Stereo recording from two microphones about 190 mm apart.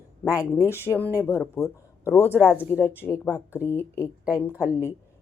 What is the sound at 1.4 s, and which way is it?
Speech, centre (ahead or behind).